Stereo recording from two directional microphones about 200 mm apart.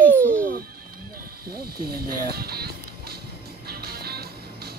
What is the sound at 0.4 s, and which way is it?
Music, 45° right (ahead or behind).